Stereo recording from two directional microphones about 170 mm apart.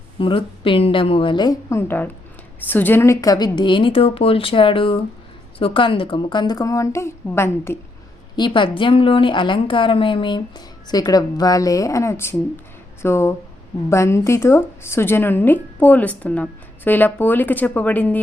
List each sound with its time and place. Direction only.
0.2 s a woman's voice: 30° left (ahead or behind)
1.9 s a woman's voice: 10° left (ahead or behind)
8.4 s a woman's voice: 30° left (ahead or behind); by 18.2 s 10° left (ahead or behind)